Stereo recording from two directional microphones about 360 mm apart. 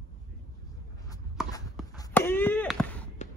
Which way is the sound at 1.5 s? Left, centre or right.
Centre.